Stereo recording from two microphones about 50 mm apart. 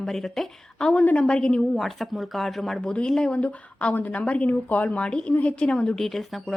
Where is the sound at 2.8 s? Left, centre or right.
Centre.